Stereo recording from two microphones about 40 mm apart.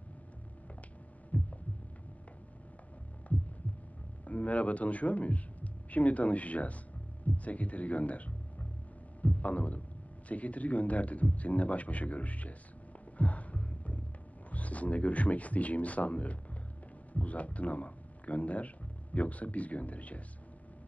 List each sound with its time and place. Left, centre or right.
1.3 s heart sounds: left
4.2 s a man's voice: left
9.2 s a sound: left
10.2 s a man's voice: left
13.2 s a sound: left
14.5 s a man's voice: left